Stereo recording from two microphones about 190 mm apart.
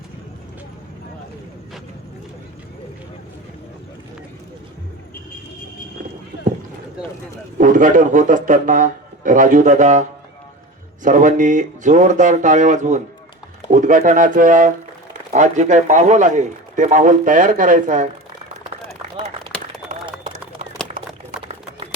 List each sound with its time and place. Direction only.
7.6 s a man's voice: 45° right (ahead or behind)
21.4 s typing: 30° right (ahead or behind)